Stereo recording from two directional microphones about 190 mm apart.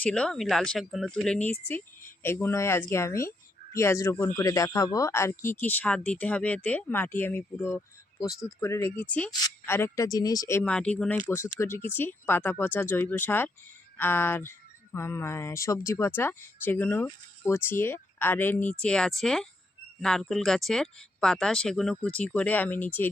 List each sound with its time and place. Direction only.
0.0 s speech: 5° left (ahead or behind)
10.6 s speech: 5° left (ahead or behind)